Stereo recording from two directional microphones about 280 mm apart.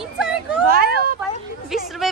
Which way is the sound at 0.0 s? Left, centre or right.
Centre.